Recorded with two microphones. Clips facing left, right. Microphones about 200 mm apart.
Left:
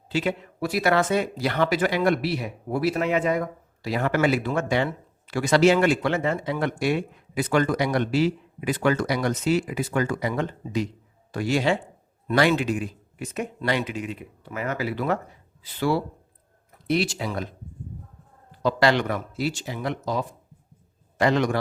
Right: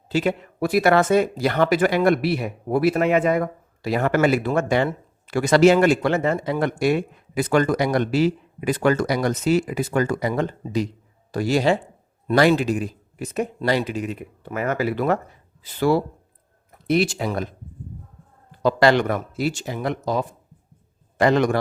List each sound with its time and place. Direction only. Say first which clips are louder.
0.1 s speech: right 4 dB; 45° right (ahead or behind)
18.6 s speech: right 4 dB; 50° right (ahead or behind)